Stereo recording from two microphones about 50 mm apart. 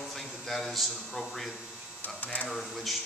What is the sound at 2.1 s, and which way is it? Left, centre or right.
Speech, left.